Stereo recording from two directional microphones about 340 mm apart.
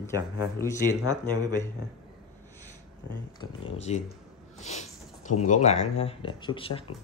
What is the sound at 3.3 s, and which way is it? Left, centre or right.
Speech, centre.